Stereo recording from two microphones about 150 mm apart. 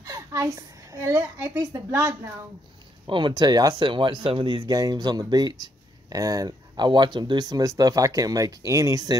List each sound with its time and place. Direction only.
0.0 s a woman's voice: 20° right (ahead or behind)
3.1 s speech: 35° right (ahead or behind)